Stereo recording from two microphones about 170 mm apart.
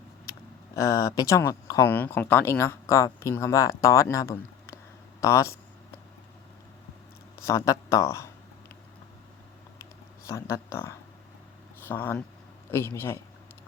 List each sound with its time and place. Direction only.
0.8 s speech: 20° left (ahead or behind)
7.4 s speech: 15° left (ahead or behind)
10.2 s speech: 15° left (ahead or behind)